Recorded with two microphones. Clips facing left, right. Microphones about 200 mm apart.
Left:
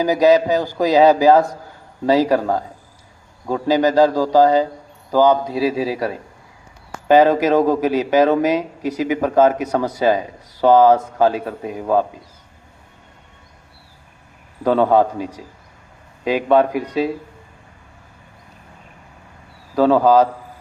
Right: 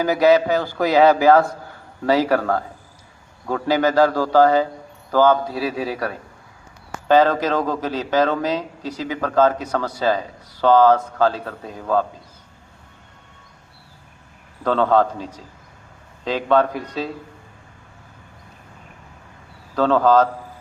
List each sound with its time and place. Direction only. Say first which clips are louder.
0.0 s a man's voice: left 2 dB; 15° left (ahead or behind)
7.1 s a man's voice: left 4 dB; 15° left (ahead or behind)
14.6 s a man's voice: left 3 dB; 15° left (ahead or behind)
19.7 s a man's voice: left 3 dB; 10° left (ahead or behind)